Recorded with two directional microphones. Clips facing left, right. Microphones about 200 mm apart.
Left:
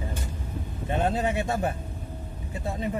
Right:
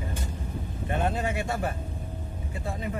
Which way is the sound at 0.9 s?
25° left (ahead or behind).